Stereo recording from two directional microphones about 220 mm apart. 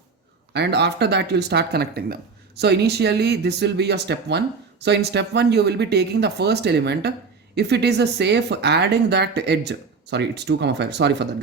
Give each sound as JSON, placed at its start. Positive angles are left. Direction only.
{"t": 0.5, "sound": "speech", "side_deg": -50}